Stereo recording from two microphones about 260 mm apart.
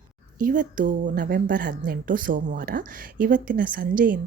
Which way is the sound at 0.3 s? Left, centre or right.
Right.